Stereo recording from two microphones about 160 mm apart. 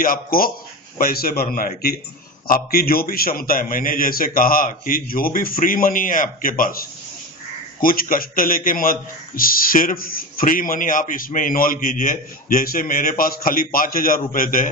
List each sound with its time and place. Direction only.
0.0 s a man's voice: 65° left (ahead or behind)